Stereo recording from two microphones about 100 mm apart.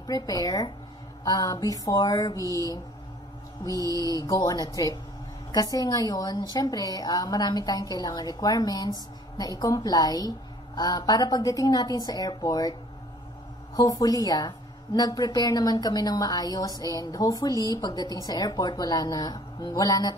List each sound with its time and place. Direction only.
0.0 s a woman's voice: 40° left (ahead or behind)
3.7 s mantra: 35° right (ahead or behind)
4.0 s a woman's voice: 40° left (ahead or behind)
13.7 s a woman's voice: 40° left (ahead or behind)